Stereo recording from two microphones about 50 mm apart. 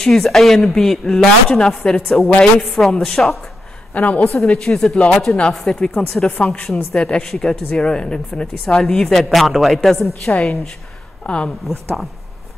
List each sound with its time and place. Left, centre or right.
0.0 s a woman's voice: centre
3.9 s a woman's voice: left
4.5 s a woman's voice: centre
4.9 s a woman's voice: centre
6.4 s a woman's voice: centre